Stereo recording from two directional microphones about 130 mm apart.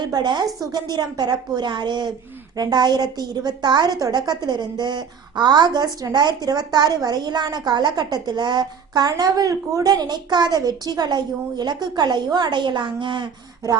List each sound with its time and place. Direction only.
0.0 s a woman's voice: 35° right (ahead or behind)